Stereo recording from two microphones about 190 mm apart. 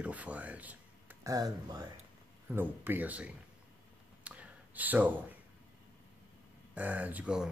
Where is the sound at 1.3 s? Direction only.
20° right (ahead or behind).